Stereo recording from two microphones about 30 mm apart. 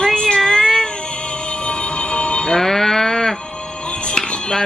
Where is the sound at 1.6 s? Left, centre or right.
Left.